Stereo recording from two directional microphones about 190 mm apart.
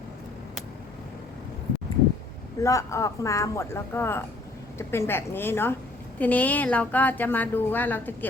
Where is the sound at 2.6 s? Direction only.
15° left (ahead or behind).